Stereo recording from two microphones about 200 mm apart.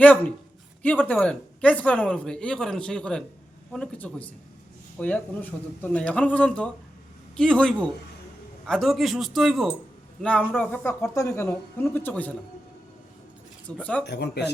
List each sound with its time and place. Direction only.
0.0 s speech: 5° left (ahead or behind)
13.7 s speech: 5° left (ahead or behind)
14.0 s speech: 55° left (ahead or behind)